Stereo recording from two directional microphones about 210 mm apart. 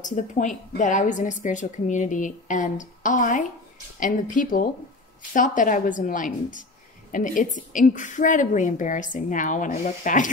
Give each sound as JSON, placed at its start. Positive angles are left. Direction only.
{"t": 0.0, "sound": "a woman's voice", "side_deg": 35}